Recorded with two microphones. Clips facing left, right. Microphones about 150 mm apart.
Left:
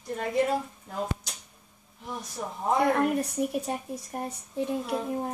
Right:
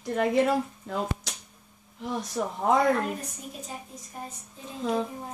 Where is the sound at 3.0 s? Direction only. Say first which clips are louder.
Left 8 dB; 65° left (ahead or behind).